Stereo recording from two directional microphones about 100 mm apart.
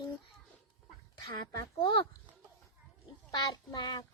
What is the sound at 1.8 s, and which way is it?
Speech, 55° left (ahead or behind).